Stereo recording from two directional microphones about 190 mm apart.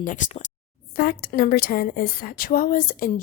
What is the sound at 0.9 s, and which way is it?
A woman's voice, 50° left (ahead or behind).